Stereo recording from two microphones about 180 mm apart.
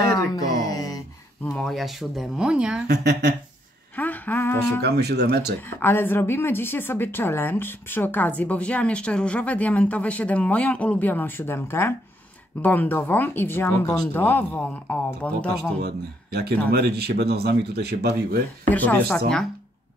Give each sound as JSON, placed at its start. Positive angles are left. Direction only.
{"t": 0.0, "sound": "a sound", "side_deg": 20}
{"t": 1.4, "sound": "speech", "side_deg": 5}
{"t": 2.9, "sound": "speech", "side_deg": -65}
{"t": 3.9, "sound": "speech", "side_deg": 10}
{"t": 4.8, "sound": "speech", "side_deg": -65}
{"t": 5.8, "sound": "a woman's voice", "side_deg": 10}
{"t": 15.8, "sound": "speech", "side_deg": -60}
{"t": 18.7, "sound": "a woman's voice", "side_deg": 10}